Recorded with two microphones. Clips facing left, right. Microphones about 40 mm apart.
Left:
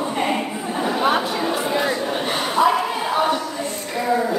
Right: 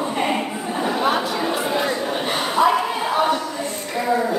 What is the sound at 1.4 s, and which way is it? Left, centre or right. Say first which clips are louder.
Chatter: even; centre.